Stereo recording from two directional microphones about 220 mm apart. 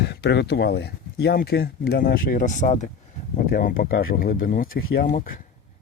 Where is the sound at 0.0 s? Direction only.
50° left (ahead or behind).